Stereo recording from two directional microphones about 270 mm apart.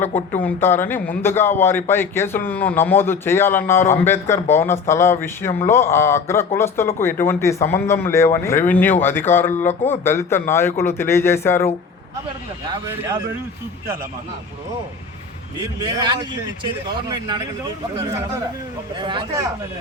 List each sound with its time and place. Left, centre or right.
0.0 s a man's voice: centre
12.6 s speech: centre
15.8 s speech: centre
18.9 s speech: centre